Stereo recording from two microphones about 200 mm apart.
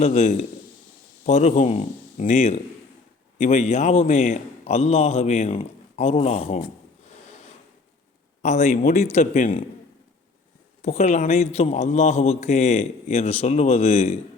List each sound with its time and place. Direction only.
0.0 s a man's voice: 35° left (ahead or behind)
8.4 s a man's voice: 35° left (ahead or behind)
10.8 s a man's voice: 35° left (ahead or behind)